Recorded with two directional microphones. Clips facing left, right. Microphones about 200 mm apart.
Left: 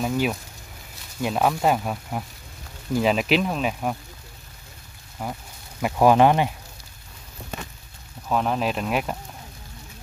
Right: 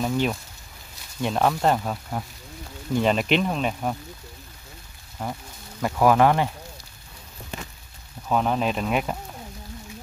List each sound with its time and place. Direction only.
0.0 s speech: 5° left (ahead or behind)
5.2 s speech: 5° left (ahead or behind)
8.3 s speech: centre (ahead or behind)